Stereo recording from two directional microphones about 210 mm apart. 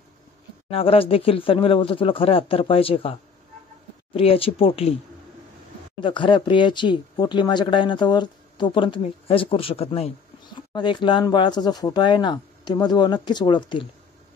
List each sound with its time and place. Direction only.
0.7 s speech: 25° left (ahead or behind)
5.9 s speech: 20° left (ahead or behind)